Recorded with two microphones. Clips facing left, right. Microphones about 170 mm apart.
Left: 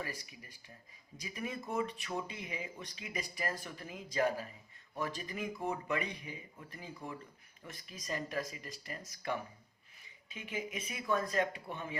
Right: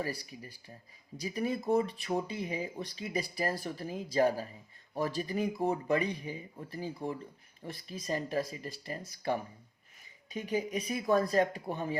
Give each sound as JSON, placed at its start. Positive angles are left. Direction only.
{"t": 0.0, "sound": "speech", "side_deg": -35}